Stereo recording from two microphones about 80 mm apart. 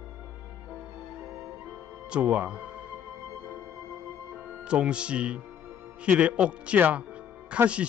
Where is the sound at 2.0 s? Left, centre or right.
Centre.